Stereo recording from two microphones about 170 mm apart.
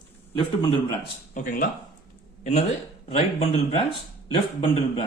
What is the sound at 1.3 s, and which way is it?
Speech, 55° left (ahead or behind).